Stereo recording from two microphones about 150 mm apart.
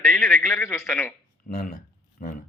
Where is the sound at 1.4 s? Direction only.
70° left (ahead or behind).